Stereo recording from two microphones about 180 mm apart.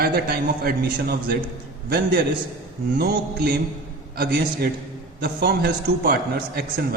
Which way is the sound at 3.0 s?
60° right (ahead or behind).